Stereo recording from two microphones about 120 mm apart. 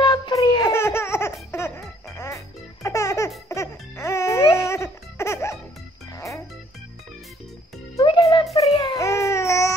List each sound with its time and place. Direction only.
0.0 s a sound: 40° left (ahead or behind)
0.7 s laughter: 20° left (ahead or behind)
1.5 s music: 25° left (ahead or behind)
8.0 s music: 45° left (ahead or behind)
8.6 s a sound: 40° left (ahead or behind)
9.0 s baby cry: 25° left (ahead or behind)